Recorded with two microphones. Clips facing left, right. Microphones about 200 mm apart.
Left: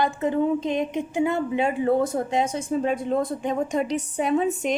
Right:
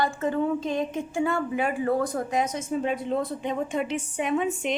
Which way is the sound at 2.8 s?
45° left (ahead or behind).